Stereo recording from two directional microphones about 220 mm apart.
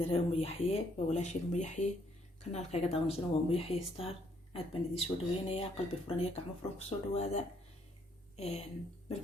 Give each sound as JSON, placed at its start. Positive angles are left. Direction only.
{"t": 0.0, "sound": "speech", "side_deg": 25}